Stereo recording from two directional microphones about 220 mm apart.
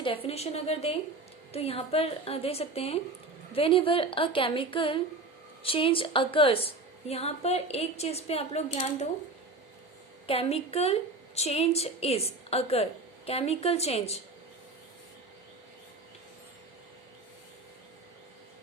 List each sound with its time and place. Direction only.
0.0 s a woman's voice: 25° left (ahead or behind)
10.2 s a woman's voice: 25° left (ahead or behind)